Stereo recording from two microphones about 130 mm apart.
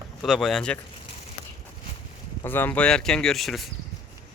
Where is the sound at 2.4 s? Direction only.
15° left (ahead or behind).